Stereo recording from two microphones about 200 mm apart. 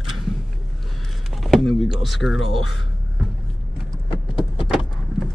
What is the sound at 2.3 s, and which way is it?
Speech, 90° left.